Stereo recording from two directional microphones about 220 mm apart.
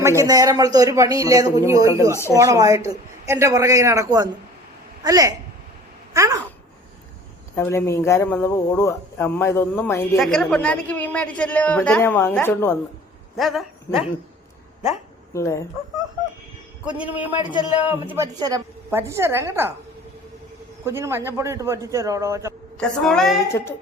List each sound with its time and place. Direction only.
0.0 s speech: 15° right (ahead or behind)
7.5 s a man's voice: 10° left (ahead or behind)
15.3 s speech: 15° left (ahead or behind)
17.0 s speech: 5° right (ahead or behind)
20.8 s speech: 10° right (ahead or behind)
22.8 s a woman's voice: centre (ahead or behind)
23.5 s speech: 10° left (ahead or behind)